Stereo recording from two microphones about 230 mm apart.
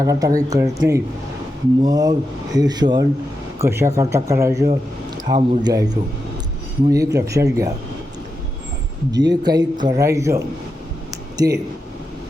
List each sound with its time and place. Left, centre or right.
0.0 s speech: centre
9.1 s speech: centre